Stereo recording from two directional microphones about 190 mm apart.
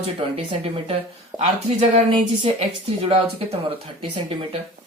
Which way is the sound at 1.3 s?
35° right (ahead or behind).